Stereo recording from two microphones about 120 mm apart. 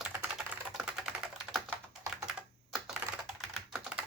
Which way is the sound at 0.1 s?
20° right (ahead or behind).